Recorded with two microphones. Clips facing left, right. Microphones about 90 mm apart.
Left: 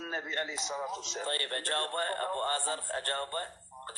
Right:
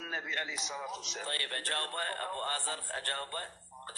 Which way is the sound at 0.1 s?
35° left (ahead or behind).